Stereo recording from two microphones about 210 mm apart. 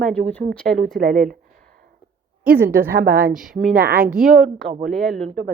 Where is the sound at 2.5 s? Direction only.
10° right (ahead or behind).